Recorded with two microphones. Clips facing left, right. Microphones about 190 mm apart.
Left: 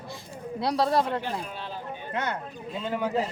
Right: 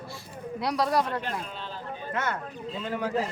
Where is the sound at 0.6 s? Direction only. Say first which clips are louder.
Left 2 dB; 30° left (ahead or behind).